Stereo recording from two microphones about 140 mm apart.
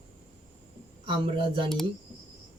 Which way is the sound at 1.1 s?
40° right (ahead or behind).